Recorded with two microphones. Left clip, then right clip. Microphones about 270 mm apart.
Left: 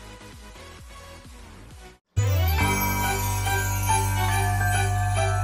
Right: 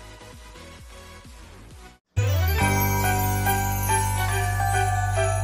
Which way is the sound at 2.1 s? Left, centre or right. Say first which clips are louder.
Right 1 dB; centre.